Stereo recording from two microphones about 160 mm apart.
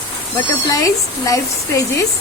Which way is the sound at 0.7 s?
20° left (ahead or behind).